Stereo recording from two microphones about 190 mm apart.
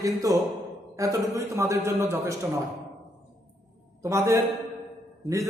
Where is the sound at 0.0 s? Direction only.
15° right (ahead or behind).